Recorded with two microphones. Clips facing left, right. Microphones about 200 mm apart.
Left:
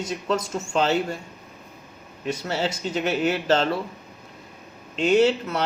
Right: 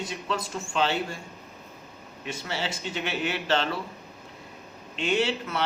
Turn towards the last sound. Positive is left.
turn(degrees=40)  # may be behind; listen again after turning